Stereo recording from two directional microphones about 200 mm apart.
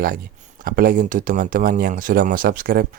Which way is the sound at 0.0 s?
45° right (ahead or behind).